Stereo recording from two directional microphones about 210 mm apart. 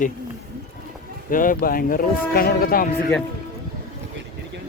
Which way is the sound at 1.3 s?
40° left (ahead or behind).